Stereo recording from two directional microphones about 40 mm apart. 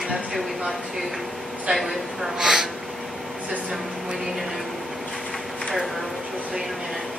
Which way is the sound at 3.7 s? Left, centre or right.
Centre.